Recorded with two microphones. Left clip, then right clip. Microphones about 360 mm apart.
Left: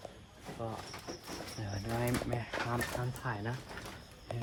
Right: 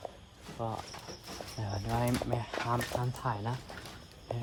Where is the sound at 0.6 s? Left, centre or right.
Centre.